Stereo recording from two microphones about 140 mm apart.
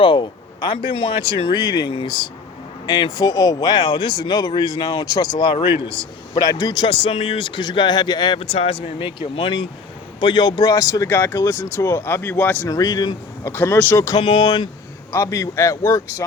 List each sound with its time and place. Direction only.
0.0 s speech: 35° left (ahead or behind); by 12.5 s 15° left (ahead or behind)
12.6 s speech: 25° left (ahead or behind)
13.4 s speech: 15° left (ahead or behind)
14.2 s speech: 45° left (ahead or behind)
15.1 s speech: 20° left (ahead or behind)